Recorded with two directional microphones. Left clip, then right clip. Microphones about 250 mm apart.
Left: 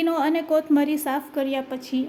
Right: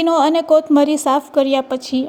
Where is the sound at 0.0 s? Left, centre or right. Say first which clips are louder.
Right 8 dB; right.